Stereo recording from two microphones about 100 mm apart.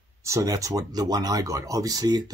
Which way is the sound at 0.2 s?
30° right (ahead or behind).